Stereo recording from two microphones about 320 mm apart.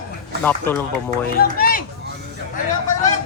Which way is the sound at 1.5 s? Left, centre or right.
Left.